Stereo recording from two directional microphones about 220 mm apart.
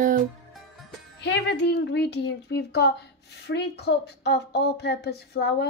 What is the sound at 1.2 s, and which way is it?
A woman's voice, 50° left (ahead or behind).